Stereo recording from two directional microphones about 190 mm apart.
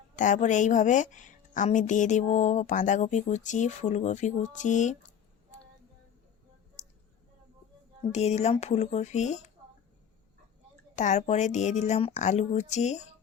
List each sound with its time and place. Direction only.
0.2 s a woman's voice: 40° left (ahead or behind)
8.1 s a woman's voice: 35° left (ahead or behind)
10.9 s a woman's voice: 40° left (ahead or behind)